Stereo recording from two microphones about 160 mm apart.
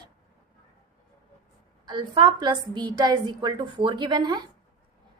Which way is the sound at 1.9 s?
30° right (ahead or behind).